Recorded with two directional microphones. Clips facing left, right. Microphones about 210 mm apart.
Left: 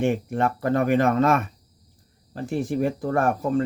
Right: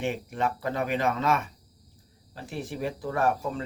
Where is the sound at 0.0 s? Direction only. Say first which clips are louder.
Left 6 dB; 50° left (ahead or behind).